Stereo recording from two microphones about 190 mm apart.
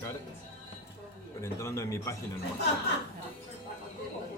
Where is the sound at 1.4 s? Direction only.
15° left (ahead or behind).